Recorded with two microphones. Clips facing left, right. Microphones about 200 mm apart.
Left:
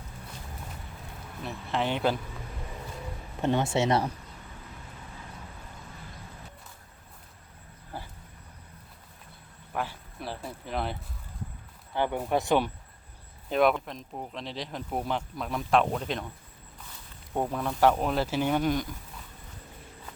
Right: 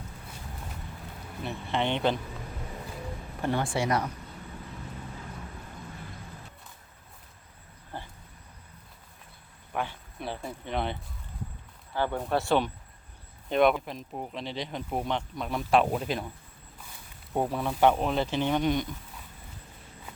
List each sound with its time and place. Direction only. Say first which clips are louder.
1.4 s speech: right 1 dB; centre (ahead or behind)
3.4 s speech: left 3 dB; 20° left (ahead or behind)
7.9 s vehicle: even; 10° left (ahead or behind)
9.7 s speech: even; centre (ahead or behind)
11.9 s speech: left 1 dB; 15° left (ahead or behind)
13.5 s speech: right 1 dB; centre (ahead or behind)
17.3 s speech: right 1 dB; 5° right (ahead or behind)